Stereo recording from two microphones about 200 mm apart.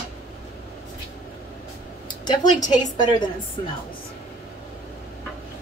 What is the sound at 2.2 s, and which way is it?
A woman's voice, 20° left (ahead or behind).